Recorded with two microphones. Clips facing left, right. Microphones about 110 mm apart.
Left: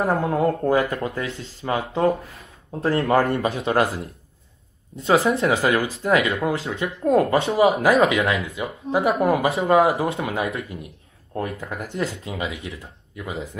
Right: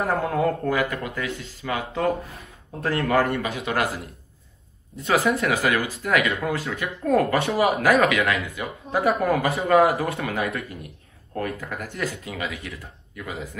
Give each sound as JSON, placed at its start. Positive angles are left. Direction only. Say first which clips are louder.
{"t": 0.0, "sound": "speech", "louder": "left 2 dB", "side_deg": 30}